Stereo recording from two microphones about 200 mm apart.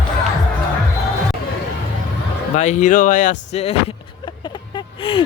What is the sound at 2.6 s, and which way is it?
Speech, 35° left (ahead or behind).